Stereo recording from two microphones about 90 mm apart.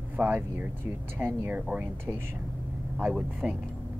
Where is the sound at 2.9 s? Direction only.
5° right (ahead or behind).